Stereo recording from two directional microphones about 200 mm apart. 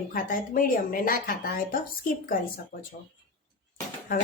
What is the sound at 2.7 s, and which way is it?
Speech, 45° left (ahead or behind).